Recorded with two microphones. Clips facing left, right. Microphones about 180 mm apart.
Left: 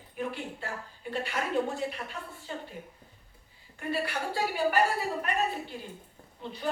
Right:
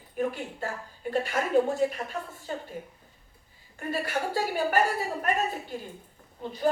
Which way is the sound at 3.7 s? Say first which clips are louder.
Right 2 dB; 45° right (ahead or behind).